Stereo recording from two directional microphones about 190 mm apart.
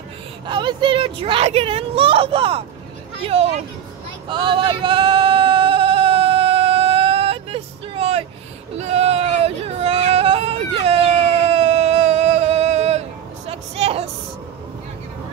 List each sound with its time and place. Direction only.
0.5 s a child's voice: 25° right (ahead or behind)
4.3 s male singing: 25° right (ahead or behind)
8.7 s yodeling: 35° right (ahead or behind)
13.5 s a sound: 30° right (ahead or behind)